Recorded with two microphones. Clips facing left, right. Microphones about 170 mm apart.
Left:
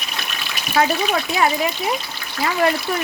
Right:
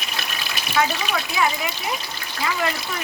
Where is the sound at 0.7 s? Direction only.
40° left (ahead or behind).